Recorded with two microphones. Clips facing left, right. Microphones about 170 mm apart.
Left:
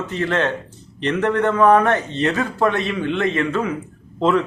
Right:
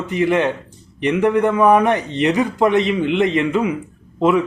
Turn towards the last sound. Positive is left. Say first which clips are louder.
# right 2 dB
turn(degrees=-10)  # may be behind; listen again after turning